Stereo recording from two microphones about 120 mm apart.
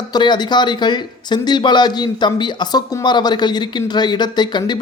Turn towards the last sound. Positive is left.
turn(degrees=35)  # may be behind; listen again after turning